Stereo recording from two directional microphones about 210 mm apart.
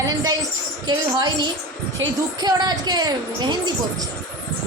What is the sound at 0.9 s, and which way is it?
A woman's voice, 20° right (ahead or behind).